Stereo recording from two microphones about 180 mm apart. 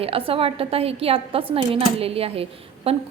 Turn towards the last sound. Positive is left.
turn(degrees=-35)  # may be behind; listen again after turning